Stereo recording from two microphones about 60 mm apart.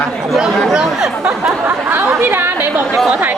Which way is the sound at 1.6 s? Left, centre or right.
Right.